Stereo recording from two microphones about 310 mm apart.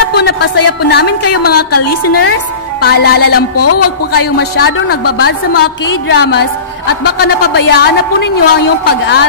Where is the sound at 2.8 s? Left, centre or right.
Left.